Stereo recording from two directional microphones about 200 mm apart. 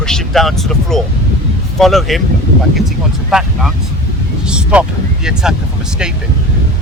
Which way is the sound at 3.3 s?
Centre (ahead or behind).